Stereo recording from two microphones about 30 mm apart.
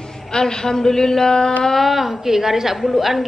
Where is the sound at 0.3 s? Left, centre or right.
Left.